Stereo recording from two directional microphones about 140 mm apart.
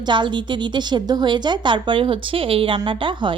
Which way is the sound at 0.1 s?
35° right (ahead or behind).